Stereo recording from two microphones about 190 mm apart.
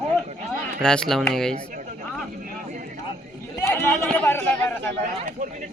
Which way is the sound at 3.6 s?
15° left (ahead or behind).